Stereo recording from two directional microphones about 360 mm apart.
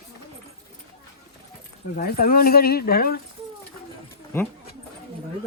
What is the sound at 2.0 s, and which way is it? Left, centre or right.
A woman's voice, left.